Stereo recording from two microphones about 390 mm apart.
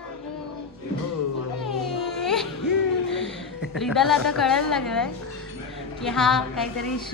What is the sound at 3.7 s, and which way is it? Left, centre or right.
Speech, centre.